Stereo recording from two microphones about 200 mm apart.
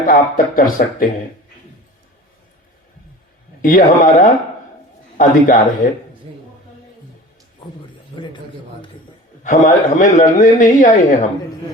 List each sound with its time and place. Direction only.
0.0 s speech: 45° left (ahead or behind)
3.6 s a man's voice: 45° left (ahead or behind)
8.1 s a man's voice: 25° left (ahead or behind)
9.4 s a man's voice: 40° left (ahead or behind)